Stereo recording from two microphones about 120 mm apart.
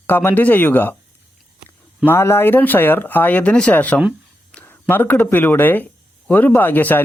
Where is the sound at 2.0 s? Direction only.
20° left (ahead or behind).